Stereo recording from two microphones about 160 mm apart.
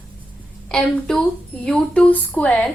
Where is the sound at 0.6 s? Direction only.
5° left (ahead or behind).